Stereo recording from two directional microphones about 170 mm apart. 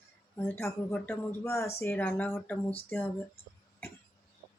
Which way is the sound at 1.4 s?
15° left (ahead or behind).